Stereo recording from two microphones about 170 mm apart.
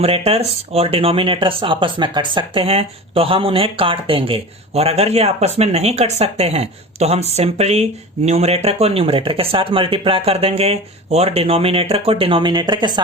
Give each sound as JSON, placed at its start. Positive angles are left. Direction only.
{"t": 0.0, "sound": "speech", "side_deg": -35}